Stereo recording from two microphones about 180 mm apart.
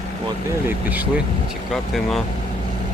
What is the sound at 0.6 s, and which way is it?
Speech, 10° right (ahead or behind).